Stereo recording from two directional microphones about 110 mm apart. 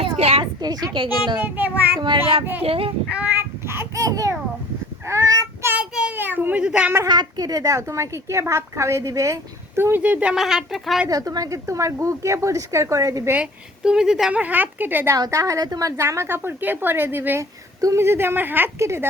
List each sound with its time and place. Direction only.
0.0 s a sound: 65° right (ahead or behind)
0.6 s a woman's voice: 35° right (ahead or behind)
1.4 s a woman's voice: 15° right (ahead or behind)
2.6 s a child's voice: 60° right (ahead or behind)
3.1 s babbling: 15° right (ahead or behind); by 4.4 s 30° right (ahead or behind)
5.0 s child singing: 30° right (ahead or behind)
5.7 s a sound: 15° right (ahead or behind)
7.1 s a woman's voice: 35° right (ahead or behind); by 11.0 s 5° right (ahead or behind)
11.1 s a woman's voice: 35° right (ahead or behind)
13.3 s a woman's voice: 10° right (ahead or behind)
15.1 s a woman's voice: 30° right (ahead or behind)
16.0 s a woman's voice: 25° right (ahead or behind)